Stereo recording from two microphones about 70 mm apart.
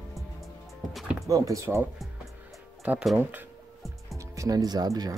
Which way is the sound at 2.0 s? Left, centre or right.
Centre.